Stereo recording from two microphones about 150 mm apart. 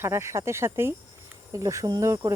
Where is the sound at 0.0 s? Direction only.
15° right (ahead or behind).